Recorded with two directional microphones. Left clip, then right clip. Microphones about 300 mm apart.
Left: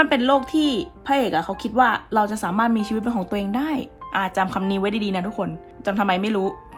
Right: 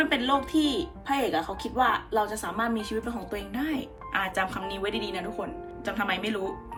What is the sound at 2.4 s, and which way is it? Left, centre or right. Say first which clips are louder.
Speech: left 8 dB; centre.